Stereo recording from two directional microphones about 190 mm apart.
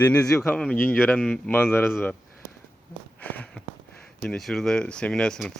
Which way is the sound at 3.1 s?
10° left (ahead or behind).